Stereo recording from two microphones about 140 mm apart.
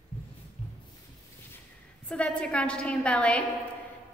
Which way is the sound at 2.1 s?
5° left (ahead or behind).